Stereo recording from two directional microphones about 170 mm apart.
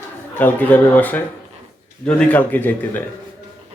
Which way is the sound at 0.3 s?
10° left (ahead or behind).